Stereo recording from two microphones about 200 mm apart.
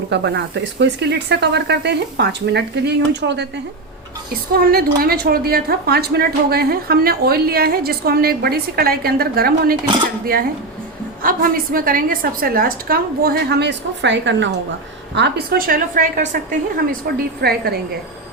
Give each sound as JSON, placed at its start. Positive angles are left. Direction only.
{"t": 0.1, "sound": "speech", "side_deg": -60}
{"t": 4.5, "sound": "a woman's voice", "side_deg": -50}
{"t": 11.2, "sound": "a woman's voice", "side_deg": -45}